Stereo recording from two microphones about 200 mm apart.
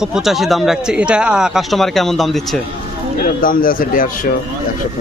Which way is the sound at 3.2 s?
45° left (ahead or behind).